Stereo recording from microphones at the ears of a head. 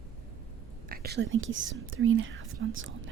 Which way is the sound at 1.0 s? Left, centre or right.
Right.